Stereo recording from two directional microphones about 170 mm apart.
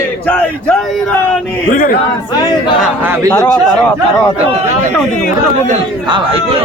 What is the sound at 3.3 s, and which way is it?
Speech, 10° left (ahead or behind).